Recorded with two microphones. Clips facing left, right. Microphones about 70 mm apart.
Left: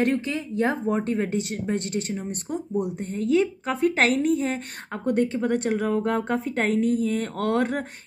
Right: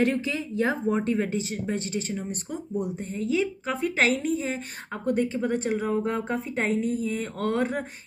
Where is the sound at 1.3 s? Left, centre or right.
Left.